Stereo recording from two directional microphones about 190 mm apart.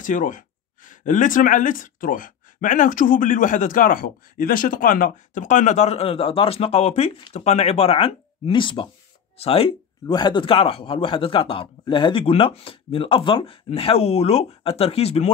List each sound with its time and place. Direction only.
0.0 s speech: 45° left (ahead or behind)